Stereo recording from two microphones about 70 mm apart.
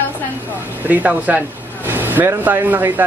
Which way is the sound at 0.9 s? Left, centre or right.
Right.